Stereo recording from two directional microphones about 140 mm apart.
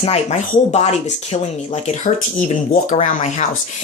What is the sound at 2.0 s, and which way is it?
Speech, 65° left (ahead or behind).